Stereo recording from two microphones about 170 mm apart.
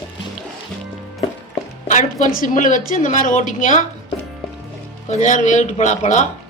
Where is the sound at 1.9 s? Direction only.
50° left (ahead or behind).